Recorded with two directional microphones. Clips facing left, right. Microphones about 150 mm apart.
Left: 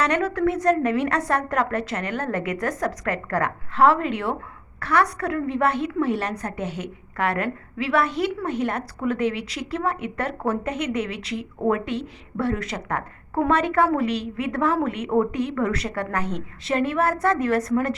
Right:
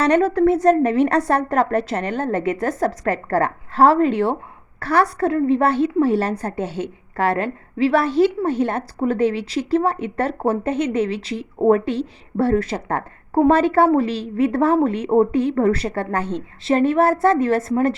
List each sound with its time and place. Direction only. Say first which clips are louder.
0.0 s a woman's voice: right 6 dB; 30° right (ahead or behind)